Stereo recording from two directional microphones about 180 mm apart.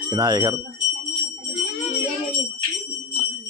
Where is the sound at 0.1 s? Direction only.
20° right (ahead or behind).